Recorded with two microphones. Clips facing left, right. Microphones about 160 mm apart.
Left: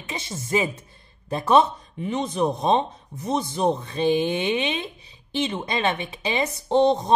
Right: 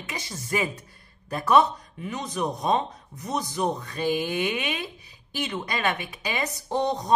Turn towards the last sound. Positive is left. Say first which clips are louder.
# left 7 dB
turn(degrees=25)  # may be behind; listen again after turning